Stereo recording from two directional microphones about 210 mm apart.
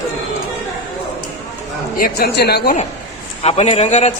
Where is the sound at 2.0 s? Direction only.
50° left (ahead or behind).